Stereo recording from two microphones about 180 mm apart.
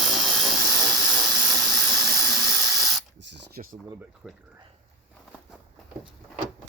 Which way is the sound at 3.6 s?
45° right (ahead or behind).